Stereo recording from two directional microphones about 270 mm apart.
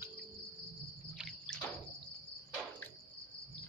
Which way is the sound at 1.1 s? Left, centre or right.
Centre.